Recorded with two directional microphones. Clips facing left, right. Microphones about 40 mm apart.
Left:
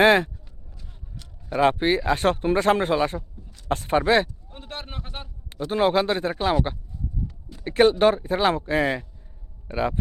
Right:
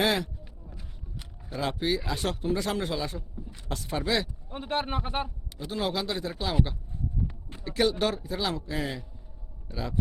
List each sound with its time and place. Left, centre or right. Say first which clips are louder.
0.0 s speech: left 9 dB; left
0.7 s a sound: left 1 dB; centre
1.5 s speech: left 9 dB; left
4.4 s a man's voice: right 7 dB; centre
5.5 s speech: left 10 dB; left
7.6 s speech: left 9 dB; left